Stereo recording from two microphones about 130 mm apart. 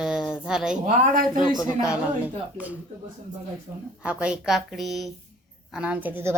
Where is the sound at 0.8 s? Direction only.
90° right.